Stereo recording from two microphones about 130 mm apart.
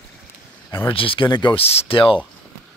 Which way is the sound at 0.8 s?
45° left (ahead or behind).